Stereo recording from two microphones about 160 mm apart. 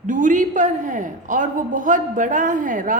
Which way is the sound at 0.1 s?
55° right (ahead or behind).